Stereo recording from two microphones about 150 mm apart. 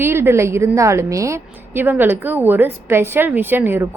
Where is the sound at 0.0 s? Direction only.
15° right (ahead or behind).